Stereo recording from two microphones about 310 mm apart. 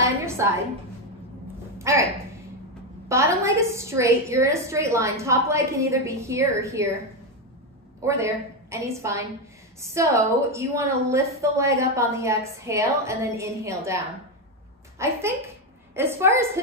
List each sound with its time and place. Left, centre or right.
0.0 s a sound: centre
1.8 s speech: centre
3.1 s a woman's voice: centre
8.0 s a woman's voice: centre
15.0 s a woman's voice: centre